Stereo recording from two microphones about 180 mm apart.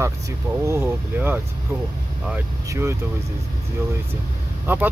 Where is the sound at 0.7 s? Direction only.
15° right (ahead or behind).